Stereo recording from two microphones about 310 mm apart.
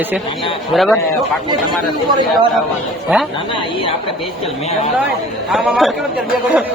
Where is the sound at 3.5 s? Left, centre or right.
Centre.